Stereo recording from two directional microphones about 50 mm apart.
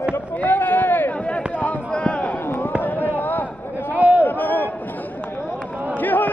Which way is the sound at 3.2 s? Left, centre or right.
Left.